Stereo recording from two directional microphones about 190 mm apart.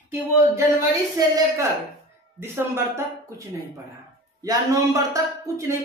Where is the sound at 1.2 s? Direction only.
20° right (ahead or behind).